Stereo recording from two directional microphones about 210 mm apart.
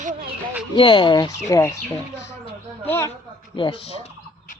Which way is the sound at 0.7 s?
25° left (ahead or behind).